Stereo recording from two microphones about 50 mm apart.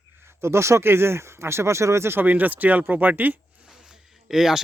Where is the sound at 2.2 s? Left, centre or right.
Right.